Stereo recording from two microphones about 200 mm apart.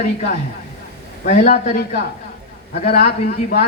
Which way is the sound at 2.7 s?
55° left (ahead or behind).